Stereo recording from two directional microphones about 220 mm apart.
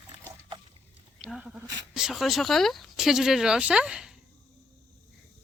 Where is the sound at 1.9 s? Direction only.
Centre (ahead or behind).